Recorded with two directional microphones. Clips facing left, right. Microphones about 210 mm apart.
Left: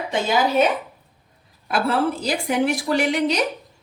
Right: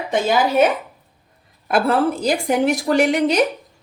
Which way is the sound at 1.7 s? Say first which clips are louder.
Right 4 dB; 50° right (ahead or behind).